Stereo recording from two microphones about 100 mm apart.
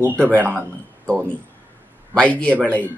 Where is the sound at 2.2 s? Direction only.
10° left (ahead or behind).